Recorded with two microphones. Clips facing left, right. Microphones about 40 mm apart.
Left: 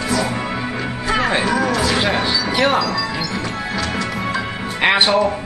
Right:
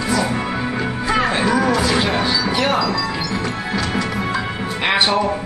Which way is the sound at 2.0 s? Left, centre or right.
Centre.